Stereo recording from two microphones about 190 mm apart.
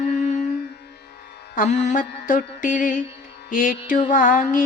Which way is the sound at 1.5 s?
40° left (ahead or behind).